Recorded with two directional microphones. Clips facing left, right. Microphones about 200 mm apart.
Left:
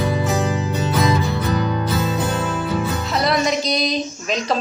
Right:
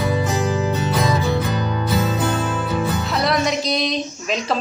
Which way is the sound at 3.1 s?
Centre (ahead or behind).